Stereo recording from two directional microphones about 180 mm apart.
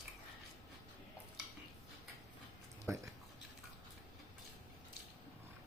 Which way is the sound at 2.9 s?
15° right (ahead or behind).